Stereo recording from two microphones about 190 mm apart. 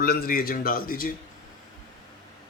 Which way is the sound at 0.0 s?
50° left (ahead or behind).